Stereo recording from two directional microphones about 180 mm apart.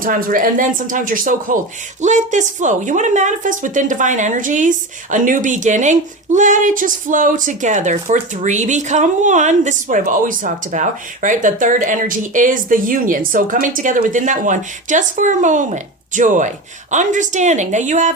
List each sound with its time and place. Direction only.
0.0 s speech: 50° right (ahead or behind)